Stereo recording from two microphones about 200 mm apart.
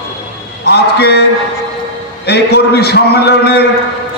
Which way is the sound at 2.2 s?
55° left (ahead or behind).